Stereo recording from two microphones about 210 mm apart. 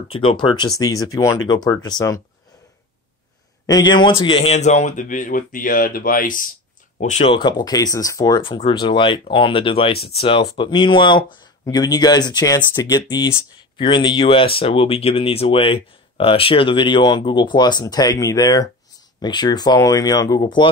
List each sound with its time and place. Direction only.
0.1 s speech: 25° left (ahead or behind)
3.6 s a man's voice: 20° left (ahead or behind)